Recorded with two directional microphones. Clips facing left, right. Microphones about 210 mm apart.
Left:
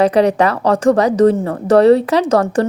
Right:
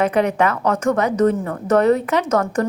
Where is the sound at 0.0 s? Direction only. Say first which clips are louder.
Left 5 dB; 35° left (ahead or behind).